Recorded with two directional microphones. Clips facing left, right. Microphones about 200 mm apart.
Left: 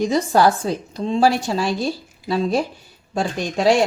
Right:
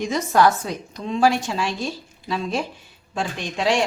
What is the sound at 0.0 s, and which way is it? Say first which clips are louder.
A woman's voice: left 2 dB; 35° left (ahead or behind).